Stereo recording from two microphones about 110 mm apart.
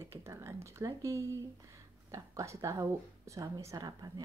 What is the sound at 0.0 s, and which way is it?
Speech, 25° right (ahead or behind).